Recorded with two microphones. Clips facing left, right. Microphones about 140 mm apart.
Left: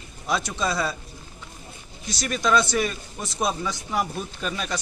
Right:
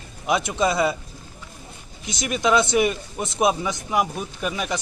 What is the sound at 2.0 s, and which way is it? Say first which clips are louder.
Speech: right 2 dB; 15° right (ahead or behind).